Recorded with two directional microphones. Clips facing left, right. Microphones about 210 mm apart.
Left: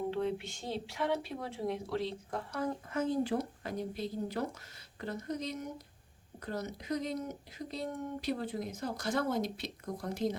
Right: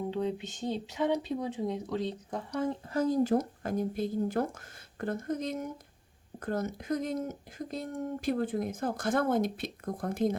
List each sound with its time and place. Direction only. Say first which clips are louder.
0.1 s speech: right 2 dB; 20° right (ahead or behind)
2.9 s speech: right 6 dB; 40° right (ahead or behind)